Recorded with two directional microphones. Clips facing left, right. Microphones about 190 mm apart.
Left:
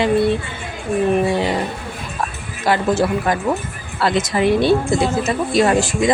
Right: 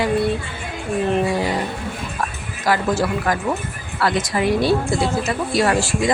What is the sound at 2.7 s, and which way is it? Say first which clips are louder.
Speech: left 3 dB; 25° left (ahead or behind).